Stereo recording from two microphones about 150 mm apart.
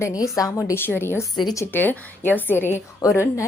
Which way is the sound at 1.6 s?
10° left (ahead or behind).